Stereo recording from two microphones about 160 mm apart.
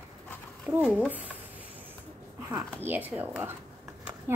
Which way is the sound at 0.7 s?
10° right (ahead or behind).